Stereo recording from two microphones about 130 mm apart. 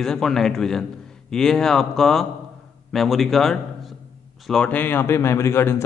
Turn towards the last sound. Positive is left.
turn(degrees=20)  # may be behind; listen again after turning